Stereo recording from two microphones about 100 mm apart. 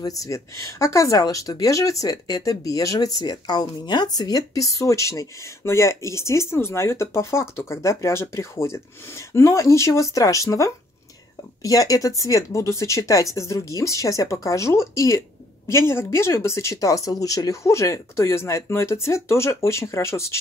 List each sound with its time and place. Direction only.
0.0 s speech: 35° left (ahead or behind)